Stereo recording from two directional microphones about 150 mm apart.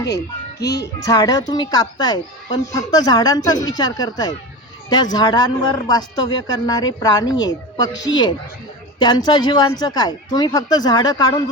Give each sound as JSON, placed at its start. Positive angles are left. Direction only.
{"t": 0.7, "sound": "speech", "side_deg": 25}